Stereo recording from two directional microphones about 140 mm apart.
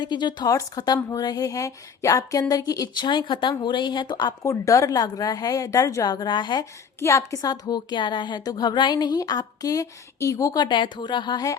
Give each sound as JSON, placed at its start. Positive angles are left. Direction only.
{"t": 0.0, "sound": "a woman's voice", "side_deg": 35}
{"t": 7.0, "sound": "a woman's voice", "side_deg": 20}